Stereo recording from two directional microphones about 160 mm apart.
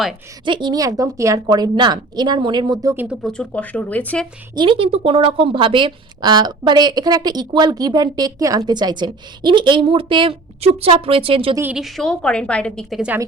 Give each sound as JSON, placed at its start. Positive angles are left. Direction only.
{"t": 0.4, "sound": "a woman's voice", "side_deg": -30}
{"t": 2.9, "sound": "speech", "side_deg": -10}
{"t": 3.2, "sound": "speech", "side_deg": 5}
{"t": 4.5, "sound": "a woman's voice", "side_deg": -30}
{"t": 11.7, "sound": "a woman's voice", "side_deg": 0}